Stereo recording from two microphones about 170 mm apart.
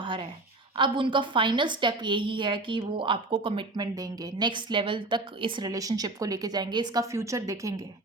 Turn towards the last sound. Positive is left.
turn(degrees=-20)  # may be behind; listen again after turning